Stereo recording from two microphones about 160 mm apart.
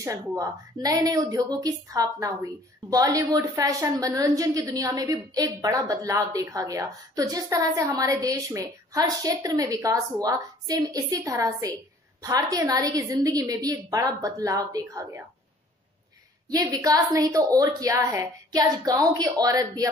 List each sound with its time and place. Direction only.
0.0 s a woman's voice: 20° right (ahead or behind)
16.4 s a woman's voice: 20° right (ahead or behind)